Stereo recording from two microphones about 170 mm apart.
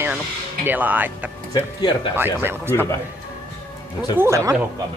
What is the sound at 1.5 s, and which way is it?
Speech, 25° left (ahead or behind).